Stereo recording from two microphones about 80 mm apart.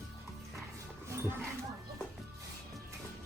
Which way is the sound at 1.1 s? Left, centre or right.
Right.